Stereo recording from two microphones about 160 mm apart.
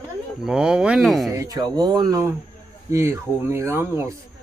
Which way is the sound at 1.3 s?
25° right (ahead or behind).